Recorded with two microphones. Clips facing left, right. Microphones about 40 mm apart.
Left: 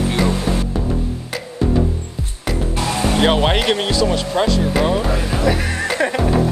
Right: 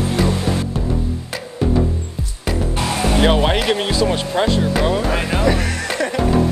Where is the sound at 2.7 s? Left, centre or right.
Right.